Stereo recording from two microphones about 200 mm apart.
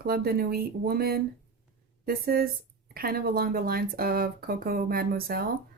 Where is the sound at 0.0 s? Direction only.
50° right (ahead or behind).